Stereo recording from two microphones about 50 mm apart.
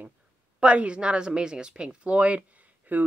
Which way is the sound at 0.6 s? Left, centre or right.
Right.